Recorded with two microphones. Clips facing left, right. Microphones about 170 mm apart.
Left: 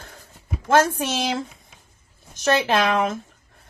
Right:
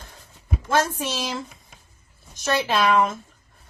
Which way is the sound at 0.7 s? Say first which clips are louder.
Left 4 dB; 80° left.